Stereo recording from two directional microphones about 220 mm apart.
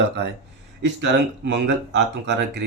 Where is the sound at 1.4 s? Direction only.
55° right (ahead or behind).